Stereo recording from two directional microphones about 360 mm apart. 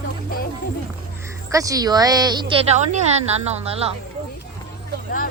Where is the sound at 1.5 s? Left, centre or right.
Centre.